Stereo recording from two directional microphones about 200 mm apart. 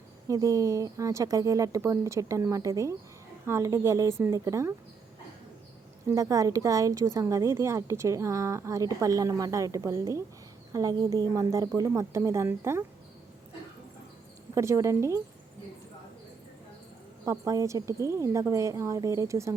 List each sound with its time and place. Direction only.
0.3 s a woman's voice: 15° right (ahead or behind)
6.1 s a woman's voice: 15° right (ahead or behind)
14.5 s a woman's voice: 15° right (ahead or behind)
17.2 s a woman's voice: 15° right (ahead or behind)